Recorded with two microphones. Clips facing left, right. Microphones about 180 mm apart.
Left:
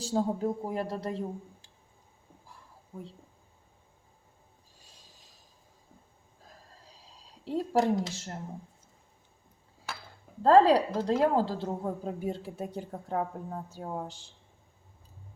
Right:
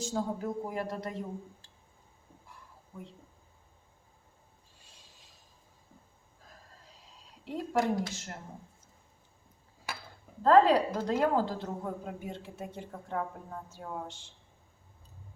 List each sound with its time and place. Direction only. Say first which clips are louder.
0.0 s a woman's voice: left 4 dB; 30° left (ahead or behind)
7.4 s a woman's voice: left 3 dB; 30° left (ahead or behind)
10.4 s a woman's voice: left 2 dB; 30° left (ahead or behind)